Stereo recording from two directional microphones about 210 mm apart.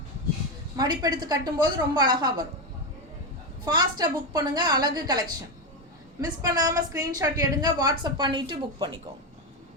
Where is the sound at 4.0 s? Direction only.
20° right (ahead or behind).